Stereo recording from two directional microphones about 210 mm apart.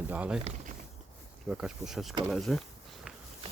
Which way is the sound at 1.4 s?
5° right (ahead or behind).